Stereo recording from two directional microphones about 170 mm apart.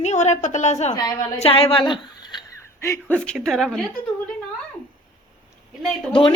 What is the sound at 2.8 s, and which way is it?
Speech, 15° left (ahead or behind).